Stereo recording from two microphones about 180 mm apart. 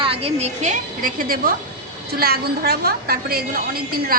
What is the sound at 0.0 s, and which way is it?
A woman's voice, 30° right (ahead or behind).